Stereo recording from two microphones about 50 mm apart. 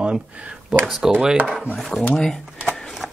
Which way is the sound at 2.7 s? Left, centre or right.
Centre.